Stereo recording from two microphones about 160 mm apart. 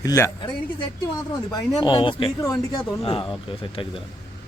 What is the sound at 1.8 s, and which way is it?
Speech, 30° left (ahead or behind).